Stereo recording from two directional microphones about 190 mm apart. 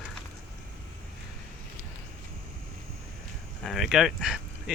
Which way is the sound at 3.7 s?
Centre (ahead or behind).